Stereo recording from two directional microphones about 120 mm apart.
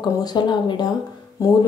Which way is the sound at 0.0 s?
35° left (ahead or behind).